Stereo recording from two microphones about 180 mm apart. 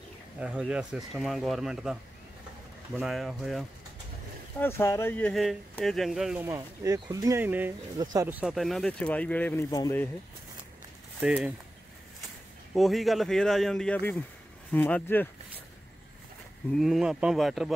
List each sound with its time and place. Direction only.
0.4 s speech: 5° right (ahead or behind)
4.6 s speech: 15° left (ahead or behind); by 6.4 s centre (ahead or behind)
6.4 s speech: 15° right (ahead or behind); by 10.0 s 20° left (ahead or behind)
11.1 s speech: 5° right (ahead or behind)
12.7 s speech: centre (ahead or behind)
16.7 s speech: centre (ahead or behind)